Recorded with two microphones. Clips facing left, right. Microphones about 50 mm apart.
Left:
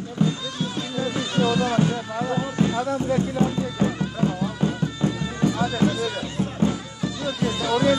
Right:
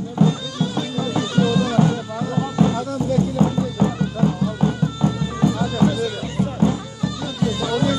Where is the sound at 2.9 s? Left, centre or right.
Left.